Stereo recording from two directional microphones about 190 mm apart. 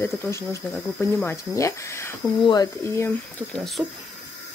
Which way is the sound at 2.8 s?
10° left (ahead or behind).